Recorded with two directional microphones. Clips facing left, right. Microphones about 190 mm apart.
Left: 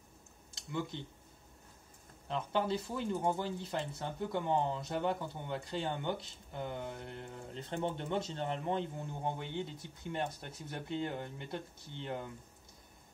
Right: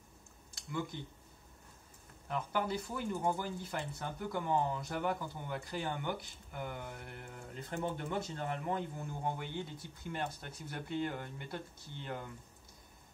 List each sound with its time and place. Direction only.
0.6 s speech: 25° left (ahead or behind)
2.2 s speech: 25° left (ahead or behind)